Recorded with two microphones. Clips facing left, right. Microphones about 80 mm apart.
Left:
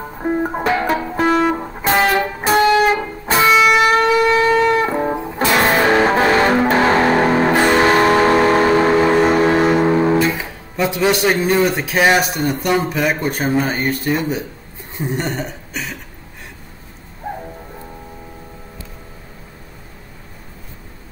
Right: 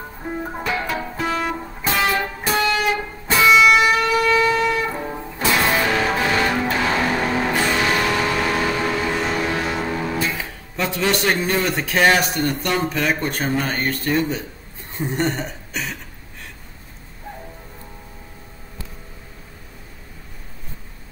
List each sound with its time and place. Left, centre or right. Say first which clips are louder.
0.2 s music: left 9 dB; left
4.0 s siren: left 4 dB; left
4.6 s music: left 7 dB; left
10.3 s speech: left 4 dB; centre
15.0 s a sound: even; centre